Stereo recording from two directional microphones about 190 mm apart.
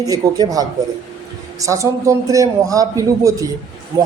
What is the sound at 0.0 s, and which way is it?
A man's voice, 20° right (ahead or behind).